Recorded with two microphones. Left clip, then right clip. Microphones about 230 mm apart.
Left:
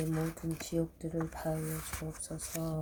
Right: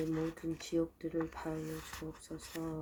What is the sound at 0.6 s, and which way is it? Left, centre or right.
Speech, left.